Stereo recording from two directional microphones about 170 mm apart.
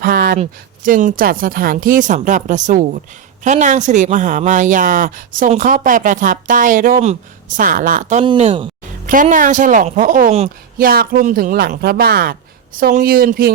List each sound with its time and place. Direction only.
0.0 s a sound: 55° right (ahead or behind)
0.3 s a woman's voice: 50° right (ahead or behind)
8.2 s speech: 35° right (ahead or behind)
9.0 s a woman's voice: 50° right (ahead or behind)